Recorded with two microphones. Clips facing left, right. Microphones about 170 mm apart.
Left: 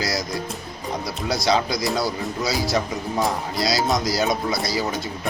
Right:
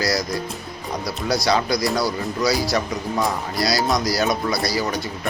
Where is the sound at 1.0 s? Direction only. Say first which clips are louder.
Right 2 dB; 20° left (ahead or behind).